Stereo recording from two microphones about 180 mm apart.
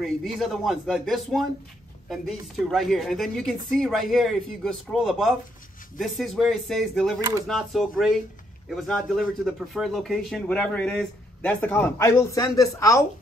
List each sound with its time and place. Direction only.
0.0 s a woman's voice: centre (ahead or behind)
5.9 s a woman's voice: centre (ahead or behind)
7.2 s speech: 20° right (ahead or behind)
7.4 s a woman's voice: centre (ahead or behind); by 13.0 s 15° left (ahead or behind)